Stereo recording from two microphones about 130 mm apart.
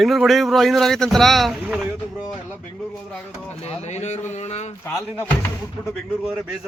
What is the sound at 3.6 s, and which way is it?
Speech, 55° left (ahead or behind).